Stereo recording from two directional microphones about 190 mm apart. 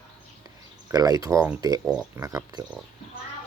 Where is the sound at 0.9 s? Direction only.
20° right (ahead or behind).